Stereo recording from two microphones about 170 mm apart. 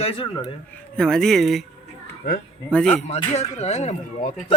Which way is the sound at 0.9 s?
5° left (ahead or behind).